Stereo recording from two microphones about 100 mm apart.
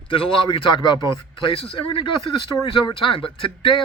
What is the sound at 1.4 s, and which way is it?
Speech, 65° left (ahead or behind).